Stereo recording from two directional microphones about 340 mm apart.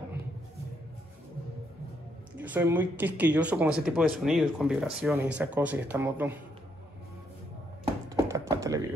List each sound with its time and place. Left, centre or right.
2.3 s speech: centre
8.3 s typing: centre